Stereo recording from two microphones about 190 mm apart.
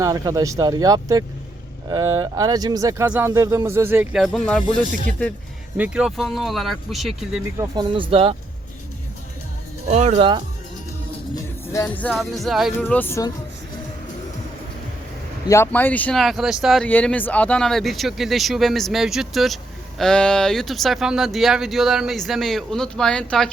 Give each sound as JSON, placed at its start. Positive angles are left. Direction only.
{"t": 0.0, "sound": "speech", "side_deg": -20}
{"t": 5.7, "sound": "speech", "side_deg": -5}
{"t": 7.6, "sound": "speech", "side_deg": -25}
{"t": 9.9, "sound": "speech", "side_deg": -35}
{"t": 11.7, "sound": "speech", "side_deg": 15}
{"t": 12.1, "sound": "speech", "side_deg": 0}
{"t": 12.8, "sound": "speech", "side_deg": 10}
{"t": 15.4, "sound": "speech", "side_deg": 15}